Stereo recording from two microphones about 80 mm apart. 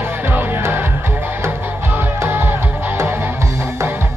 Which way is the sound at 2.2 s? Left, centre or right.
Right.